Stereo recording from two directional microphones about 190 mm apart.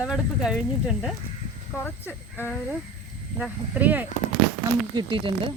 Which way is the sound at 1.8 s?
10° left (ahead or behind).